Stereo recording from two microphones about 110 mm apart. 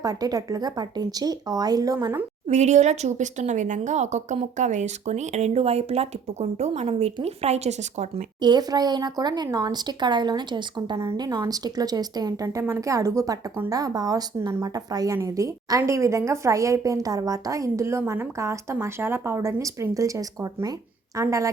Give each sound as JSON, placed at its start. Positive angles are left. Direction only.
{"t": 0.0, "sound": "speech", "side_deg": -35}
{"t": 2.5, "sound": "speech", "side_deg": -90}
{"t": 8.4, "sound": "a woman's voice", "side_deg": -40}